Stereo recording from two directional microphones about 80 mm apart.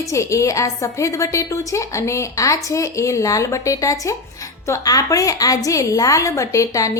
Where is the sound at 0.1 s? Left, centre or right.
Left.